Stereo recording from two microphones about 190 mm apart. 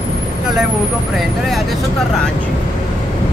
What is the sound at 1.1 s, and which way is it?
Speech, centre (ahead or behind).